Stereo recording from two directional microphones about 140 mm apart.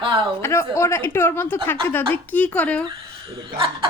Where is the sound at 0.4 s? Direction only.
20° left (ahead or behind).